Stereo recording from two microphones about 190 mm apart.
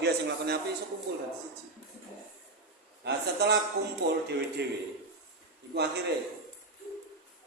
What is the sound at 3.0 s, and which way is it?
A man's voice, 60° right (ahead or behind).